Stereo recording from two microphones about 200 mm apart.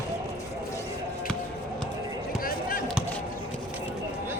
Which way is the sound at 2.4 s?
45° left (ahead or behind).